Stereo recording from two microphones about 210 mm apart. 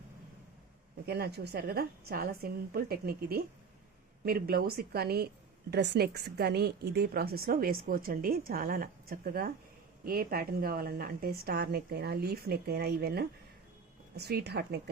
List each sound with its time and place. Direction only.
1.0 s a woman's voice: 50° right (ahead or behind)